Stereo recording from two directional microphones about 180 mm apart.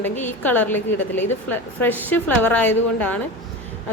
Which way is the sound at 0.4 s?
10° left (ahead or behind).